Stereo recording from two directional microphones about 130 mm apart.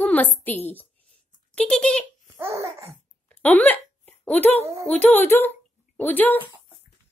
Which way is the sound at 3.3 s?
15° left (ahead or behind).